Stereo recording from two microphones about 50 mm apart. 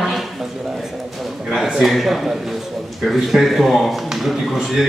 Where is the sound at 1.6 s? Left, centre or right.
Centre.